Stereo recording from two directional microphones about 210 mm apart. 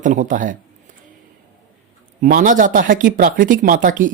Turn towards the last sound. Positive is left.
turn(degrees=-40)  # may be behind; listen again after turning